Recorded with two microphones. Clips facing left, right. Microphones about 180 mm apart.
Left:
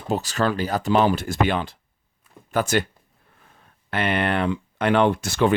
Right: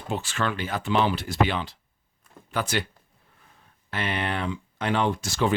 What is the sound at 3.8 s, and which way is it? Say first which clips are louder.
Speech: left 6 dB; 60° left (ahead or behind).